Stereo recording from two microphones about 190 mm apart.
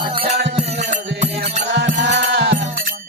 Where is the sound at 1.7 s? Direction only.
70° right (ahead or behind).